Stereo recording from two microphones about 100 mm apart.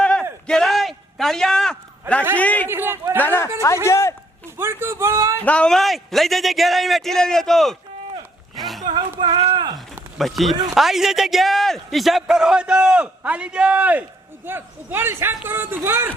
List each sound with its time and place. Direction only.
0.0 s a sound: 10° left (ahead or behind)
2.4 s a man's voice: 15° left (ahead or behind)
2.6 s a man's voice: 25° right (ahead or behind)
3.2 s speech: 20° left (ahead or behind)
4.4 s a man's voice: 25° right (ahead or behind)
5.5 s a man's voice: 10° left (ahead or behind)
8.5 s a sound: centre (ahead or behind)
8.9 s speech: 55° right (ahead or behind)
9.7 s a sound: centre (ahead or behind)
10.8 s a man's voice: 5° right (ahead or behind); by 16.1 s 25° right (ahead or behind)